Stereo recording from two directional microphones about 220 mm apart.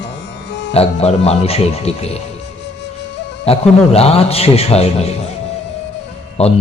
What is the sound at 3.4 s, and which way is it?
A man's voice, 25° left (ahead or behind).